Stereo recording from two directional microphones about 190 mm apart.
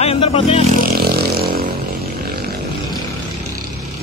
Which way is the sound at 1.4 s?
55° right (ahead or behind).